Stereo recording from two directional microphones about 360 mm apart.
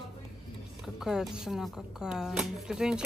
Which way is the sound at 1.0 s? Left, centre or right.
Centre.